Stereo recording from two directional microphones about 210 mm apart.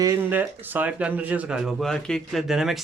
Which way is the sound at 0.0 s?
10° right (ahead or behind).